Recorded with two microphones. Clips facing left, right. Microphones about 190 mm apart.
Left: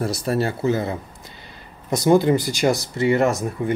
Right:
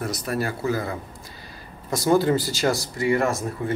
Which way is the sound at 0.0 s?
30° left (ahead or behind).